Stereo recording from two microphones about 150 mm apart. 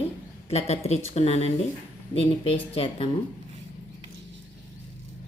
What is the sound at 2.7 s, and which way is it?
Speech, 40° left (ahead or behind).